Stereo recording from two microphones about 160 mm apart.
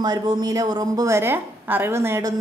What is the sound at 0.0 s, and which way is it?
A woman's voice, 25° right (ahead or behind).